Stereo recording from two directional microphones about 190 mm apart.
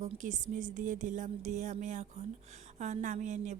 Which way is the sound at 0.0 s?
40° right (ahead or behind).